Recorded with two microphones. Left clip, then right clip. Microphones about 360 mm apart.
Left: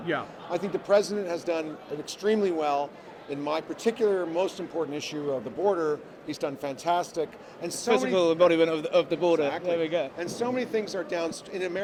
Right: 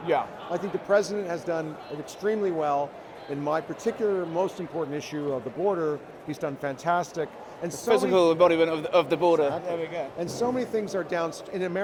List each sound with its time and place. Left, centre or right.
0.5 s speech: left
7.9 s a man's voice: right
10.2 s speech: left